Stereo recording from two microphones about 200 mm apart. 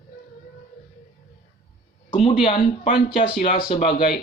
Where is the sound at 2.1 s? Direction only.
30° left (ahead or behind).